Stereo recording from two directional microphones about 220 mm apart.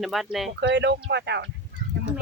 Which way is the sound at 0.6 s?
50° right (ahead or behind).